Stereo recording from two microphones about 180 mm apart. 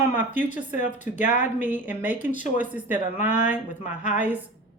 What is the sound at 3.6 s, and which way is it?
Speech, 45° left (ahead or behind).